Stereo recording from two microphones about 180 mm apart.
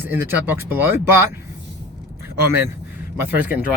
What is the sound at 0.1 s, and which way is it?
Speech, 10° right (ahead or behind).